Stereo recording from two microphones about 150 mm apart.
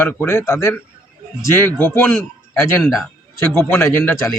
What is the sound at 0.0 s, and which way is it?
A man's voice, 15° left (ahead or behind).